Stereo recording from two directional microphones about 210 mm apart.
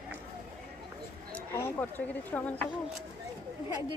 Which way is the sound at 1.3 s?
10° left (ahead or behind).